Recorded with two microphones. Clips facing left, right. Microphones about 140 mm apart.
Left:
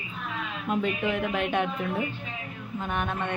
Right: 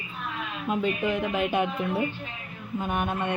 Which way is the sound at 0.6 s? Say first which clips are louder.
Right 1 dB; centre (ahead or behind).